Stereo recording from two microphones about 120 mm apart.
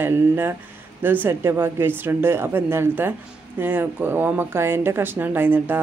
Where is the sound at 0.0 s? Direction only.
20° right (ahead or behind).